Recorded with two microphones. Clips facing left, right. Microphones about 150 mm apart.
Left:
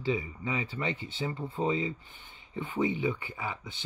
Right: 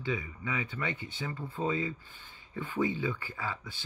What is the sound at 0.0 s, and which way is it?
Speech, 25° left (ahead or behind).